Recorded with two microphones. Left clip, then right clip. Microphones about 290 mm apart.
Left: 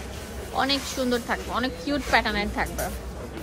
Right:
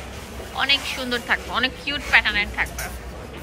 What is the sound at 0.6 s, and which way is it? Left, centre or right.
Speech, centre.